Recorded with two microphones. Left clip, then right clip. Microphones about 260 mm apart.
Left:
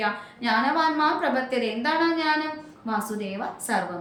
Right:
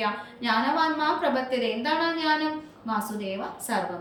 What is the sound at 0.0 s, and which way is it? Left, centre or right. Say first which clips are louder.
A woman's voice: left 2 dB; centre.